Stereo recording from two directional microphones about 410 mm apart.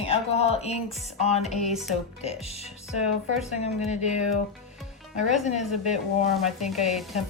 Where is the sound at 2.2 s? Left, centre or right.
Centre.